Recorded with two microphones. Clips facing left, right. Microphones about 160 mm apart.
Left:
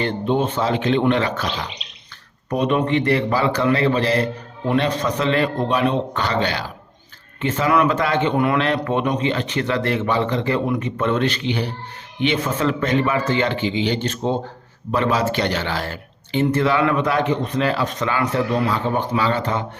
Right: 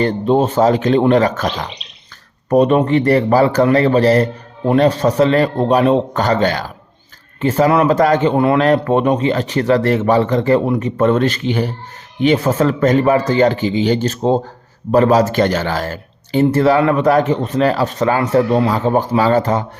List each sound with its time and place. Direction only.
0.0 s a man's voice: 40° right (ahead or behind)